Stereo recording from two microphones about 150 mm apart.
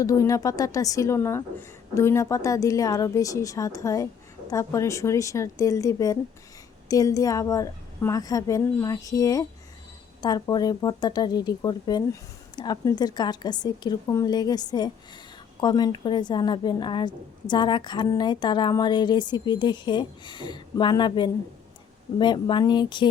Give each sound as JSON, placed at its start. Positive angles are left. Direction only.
{"t": 0.0, "sound": "a woman's voice", "side_deg": 20}